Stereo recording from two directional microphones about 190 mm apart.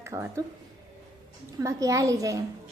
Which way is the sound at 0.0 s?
15° right (ahead or behind).